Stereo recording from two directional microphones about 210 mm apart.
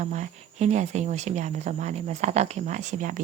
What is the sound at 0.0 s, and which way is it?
A woman's voice, 35° right (ahead or behind).